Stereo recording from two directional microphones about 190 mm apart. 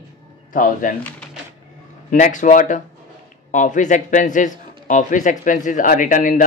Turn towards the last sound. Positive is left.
turn(degrees=45)  # may be behind; listen again after turning